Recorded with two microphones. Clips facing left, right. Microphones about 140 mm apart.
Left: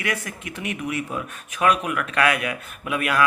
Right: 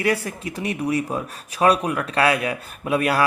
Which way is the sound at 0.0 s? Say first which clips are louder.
Right 6 dB; 35° right (ahead or behind).